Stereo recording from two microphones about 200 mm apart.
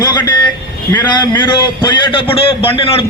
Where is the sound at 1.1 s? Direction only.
20° left (ahead or behind).